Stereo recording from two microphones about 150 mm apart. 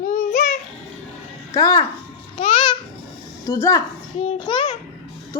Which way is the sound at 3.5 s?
20° left (ahead or behind).